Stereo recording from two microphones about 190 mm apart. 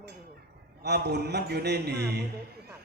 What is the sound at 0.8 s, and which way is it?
A man's voice, 60° right (ahead or behind).